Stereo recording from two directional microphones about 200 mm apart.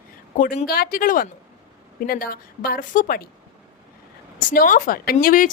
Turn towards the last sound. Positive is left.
turn(degrees=45)  # may be behind; listen again after turning